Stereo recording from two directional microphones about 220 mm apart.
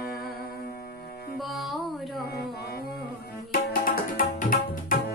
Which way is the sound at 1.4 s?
Centre (ahead or behind).